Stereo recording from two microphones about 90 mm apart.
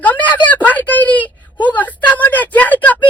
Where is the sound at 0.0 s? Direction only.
20° left (ahead or behind).